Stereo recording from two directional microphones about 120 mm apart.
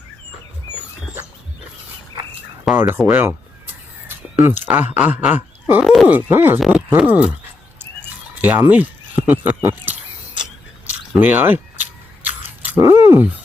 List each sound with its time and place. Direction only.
2.7 s speech: centre (ahead or behind)
4.4 s speech: 15° right (ahead or behind)
5.8 s speech: centre (ahead or behind)
6.1 s speech: 15° right (ahead or behind)
6.6 s speech: 5° right (ahead or behind)
8.4 s speech: 15° right (ahead or behind)
9.6 s a sound: 15° right (ahead or behind)